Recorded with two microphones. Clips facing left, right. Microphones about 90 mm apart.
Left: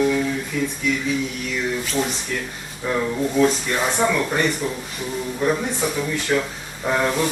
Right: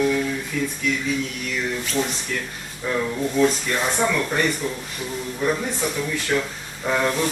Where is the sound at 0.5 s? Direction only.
5° left (ahead or behind).